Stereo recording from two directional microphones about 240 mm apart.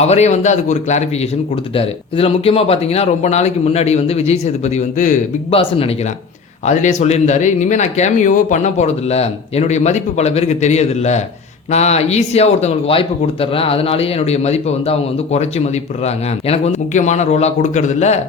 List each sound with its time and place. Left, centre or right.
0.0 s speech: left